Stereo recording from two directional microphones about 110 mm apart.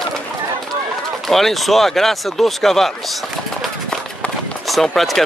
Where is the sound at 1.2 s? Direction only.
Centre (ahead or behind).